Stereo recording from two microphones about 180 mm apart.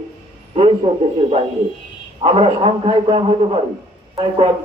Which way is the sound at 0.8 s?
30° right (ahead or behind).